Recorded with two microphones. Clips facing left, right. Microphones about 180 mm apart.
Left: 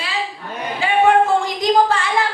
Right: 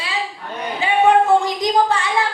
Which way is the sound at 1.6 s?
20° right (ahead or behind).